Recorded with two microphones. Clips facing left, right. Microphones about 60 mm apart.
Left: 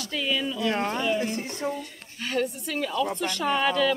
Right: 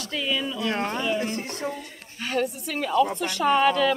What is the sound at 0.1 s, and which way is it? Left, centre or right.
Speech, centre.